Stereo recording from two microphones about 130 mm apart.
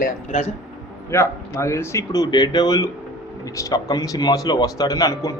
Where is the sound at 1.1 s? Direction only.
20° left (ahead or behind).